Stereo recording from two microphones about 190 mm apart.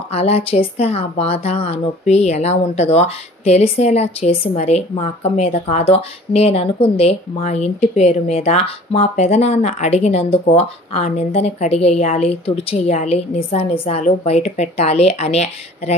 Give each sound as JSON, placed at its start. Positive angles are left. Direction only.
{"t": 0.1, "sound": "a woman's voice", "side_deg": 35}